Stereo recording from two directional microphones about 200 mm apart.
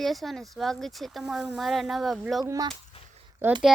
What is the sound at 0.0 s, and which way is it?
Speech, centre (ahead or behind).